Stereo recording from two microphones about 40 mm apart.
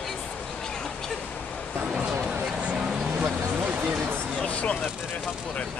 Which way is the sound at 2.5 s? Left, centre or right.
Right.